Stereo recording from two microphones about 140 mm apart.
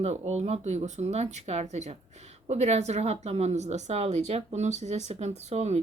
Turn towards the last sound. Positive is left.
turn(degrees=-50)  # may be behind; listen again after turning